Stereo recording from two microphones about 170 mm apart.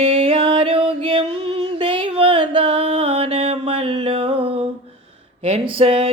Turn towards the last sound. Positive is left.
turn(degrees=-35)  # may be behind; listen again after turning